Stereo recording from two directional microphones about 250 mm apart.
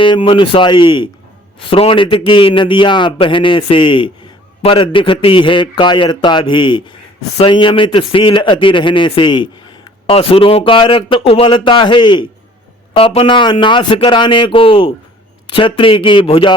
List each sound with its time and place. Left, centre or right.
0.0 s a man's voice: centre